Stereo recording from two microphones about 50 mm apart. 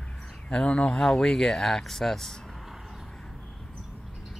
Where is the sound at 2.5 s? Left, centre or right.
Centre.